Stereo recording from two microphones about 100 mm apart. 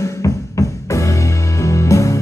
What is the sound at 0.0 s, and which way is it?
Music, 30° left (ahead or behind).